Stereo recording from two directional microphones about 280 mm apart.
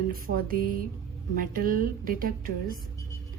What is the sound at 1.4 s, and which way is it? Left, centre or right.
Speech, right.